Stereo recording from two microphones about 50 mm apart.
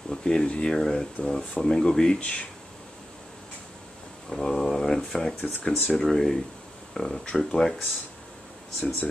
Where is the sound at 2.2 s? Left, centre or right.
Left.